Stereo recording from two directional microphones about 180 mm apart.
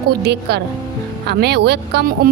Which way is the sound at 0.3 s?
65° right (ahead or behind).